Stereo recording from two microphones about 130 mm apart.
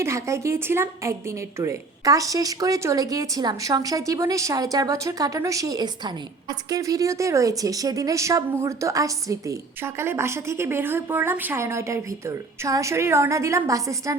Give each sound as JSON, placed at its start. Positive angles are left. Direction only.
{"t": 0.0, "sound": "a woman's voice", "side_deg": -20}